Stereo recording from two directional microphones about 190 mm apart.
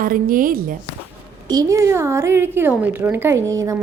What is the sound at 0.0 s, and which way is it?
Speech, 50° right (ahead or behind).